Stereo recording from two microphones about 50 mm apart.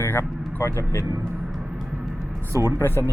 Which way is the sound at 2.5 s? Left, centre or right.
Right.